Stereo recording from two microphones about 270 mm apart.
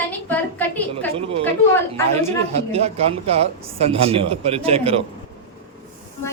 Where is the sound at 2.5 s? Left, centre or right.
Right.